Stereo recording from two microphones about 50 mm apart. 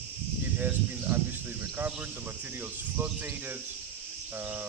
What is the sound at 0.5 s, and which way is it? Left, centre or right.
Speech, right.